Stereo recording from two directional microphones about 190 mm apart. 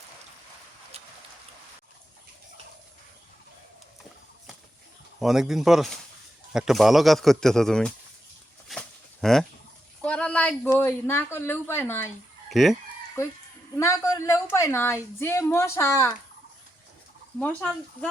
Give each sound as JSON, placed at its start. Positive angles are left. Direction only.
{"t": 0.9, "sound": "a sound", "side_deg": -35}
{"t": 5.2, "sound": "a man's voice", "side_deg": 0}
{"t": 8.7, "sound": "a sound", "side_deg": 0}
{"t": 9.2, "sound": "a man's voice", "side_deg": 0}
{"t": 12.5, "sound": "speech", "side_deg": 0}
{"t": 13.2, "sound": "speech", "side_deg": 15}
{"t": 17.4, "sound": "speech", "side_deg": 5}